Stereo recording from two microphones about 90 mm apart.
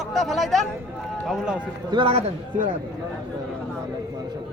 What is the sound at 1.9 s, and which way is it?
Speech, 80° right.